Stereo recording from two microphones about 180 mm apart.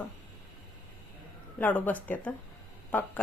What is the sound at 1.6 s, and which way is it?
Speech, 10° left (ahead or behind).